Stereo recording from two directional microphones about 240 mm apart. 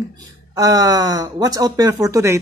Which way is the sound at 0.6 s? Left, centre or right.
Centre.